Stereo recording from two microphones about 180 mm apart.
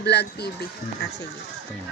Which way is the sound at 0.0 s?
70° left (ahead or behind).